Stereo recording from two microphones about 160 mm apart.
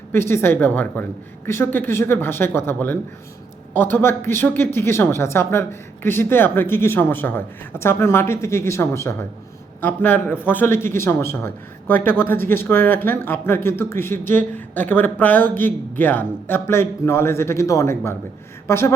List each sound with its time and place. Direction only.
0.1 s speech: 15° left (ahead or behind)